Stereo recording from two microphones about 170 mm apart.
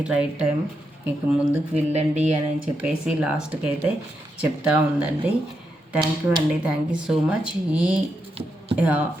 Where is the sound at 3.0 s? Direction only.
5° right (ahead or behind).